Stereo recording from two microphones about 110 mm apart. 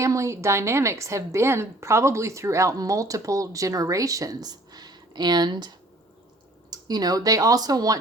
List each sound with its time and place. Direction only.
0.0 s a woman's voice: 25° right (ahead or behind)